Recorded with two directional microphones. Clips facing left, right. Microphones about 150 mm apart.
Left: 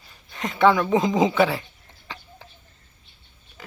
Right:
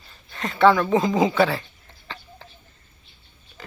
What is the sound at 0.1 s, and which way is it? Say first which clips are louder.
Speech: even; 20° left (ahead or behind).